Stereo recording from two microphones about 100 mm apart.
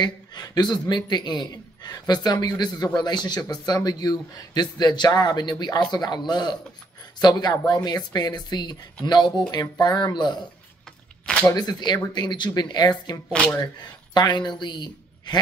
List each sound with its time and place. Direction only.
0.0 s a man's voice: 45° left (ahead or behind)
11.5 s a man's voice: 45° left (ahead or behind)